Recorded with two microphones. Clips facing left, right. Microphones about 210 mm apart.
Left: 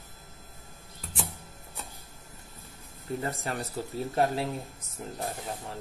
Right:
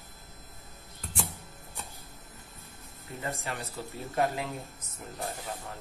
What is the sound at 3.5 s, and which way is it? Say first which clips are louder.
Speech: left 4 dB; 45° left (ahead or behind).